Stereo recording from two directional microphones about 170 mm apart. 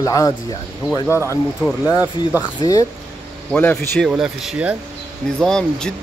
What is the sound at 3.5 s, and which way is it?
Speech, 10° left (ahead or behind).